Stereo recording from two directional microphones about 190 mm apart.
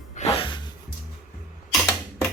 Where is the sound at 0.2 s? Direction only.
30° left (ahead or behind).